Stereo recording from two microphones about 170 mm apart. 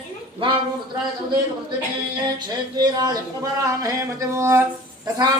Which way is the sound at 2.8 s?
25° right (ahead or behind).